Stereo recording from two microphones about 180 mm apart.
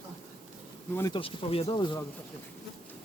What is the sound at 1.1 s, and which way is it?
Speech, 30° left (ahead or behind).